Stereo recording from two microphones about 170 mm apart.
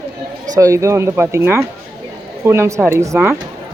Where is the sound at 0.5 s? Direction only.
20° right (ahead or behind).